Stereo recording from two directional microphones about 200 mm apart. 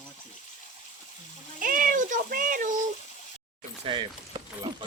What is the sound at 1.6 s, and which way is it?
Speech, 45° right (ahead or behind).